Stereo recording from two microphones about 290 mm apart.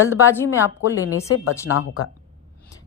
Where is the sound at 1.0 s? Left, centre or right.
Left.